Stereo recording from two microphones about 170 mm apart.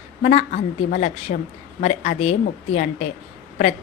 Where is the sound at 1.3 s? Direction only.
60° left (ahead or behind).